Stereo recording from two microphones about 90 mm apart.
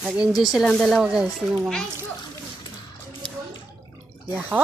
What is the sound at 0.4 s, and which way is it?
Speech, 5° right (ahead or behind).